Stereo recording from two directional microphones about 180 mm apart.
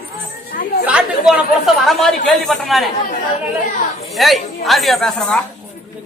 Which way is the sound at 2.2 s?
Centre (ahead or behind).